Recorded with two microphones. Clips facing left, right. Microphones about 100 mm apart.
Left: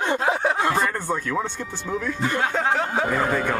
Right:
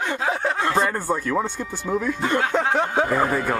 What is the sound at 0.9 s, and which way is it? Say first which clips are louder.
Speech: right 2 dB; 5° right (ahead or behind).